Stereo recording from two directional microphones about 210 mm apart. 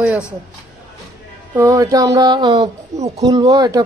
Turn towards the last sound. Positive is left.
turn(degrees=-15)  # may be behind; listen again after turning